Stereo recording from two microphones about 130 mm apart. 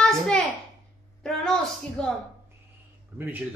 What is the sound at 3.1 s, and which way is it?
Speech, 15° right (ahead or behind).